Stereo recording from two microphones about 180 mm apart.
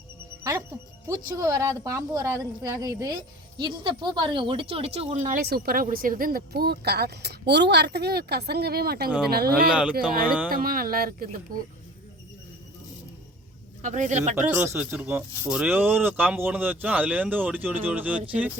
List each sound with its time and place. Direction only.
0.5 s music: 20° right (ahead or behind)
1.0 s speech: 15° right (ahead or behind); by 5.4 s 40° right (ahead or behind)
5.4 s speech: 60° right (ahead or behind)
9.6 s speech: 5° right (ahead or behind)
9.9 s speech: 50° right (ahead or behind)
13.8 s speech: 45° right (ahead or behind)
14.3 s speech: 15° right (ahead or behind)